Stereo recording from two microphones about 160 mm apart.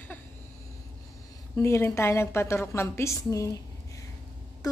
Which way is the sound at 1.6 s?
15° left (ahead or behind).